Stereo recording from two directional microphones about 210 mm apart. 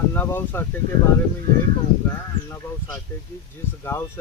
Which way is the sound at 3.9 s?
10° left (ahead or behind).